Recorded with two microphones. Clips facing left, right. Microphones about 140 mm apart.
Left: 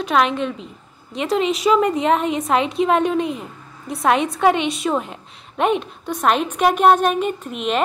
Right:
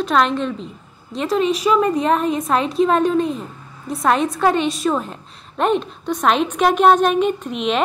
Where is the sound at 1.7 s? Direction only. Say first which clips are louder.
Left 1 dB; 20° left (ahead or behind).